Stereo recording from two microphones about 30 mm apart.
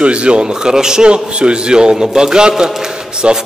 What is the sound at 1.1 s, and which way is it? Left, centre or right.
A man's voice, right.